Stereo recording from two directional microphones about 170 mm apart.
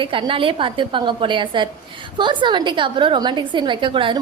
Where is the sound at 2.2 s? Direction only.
25° right (ahead or behind).